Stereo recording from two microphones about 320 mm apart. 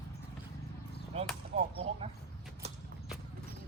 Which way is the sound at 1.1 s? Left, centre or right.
Centre.